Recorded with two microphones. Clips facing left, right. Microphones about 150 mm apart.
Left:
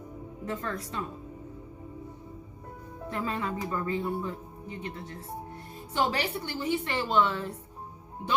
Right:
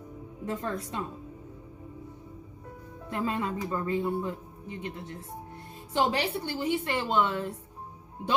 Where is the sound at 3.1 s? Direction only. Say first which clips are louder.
Right 2 dB; 20° right (ahead or behind).